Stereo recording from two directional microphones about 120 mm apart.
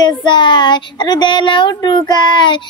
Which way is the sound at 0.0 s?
40° left (ahead or behind).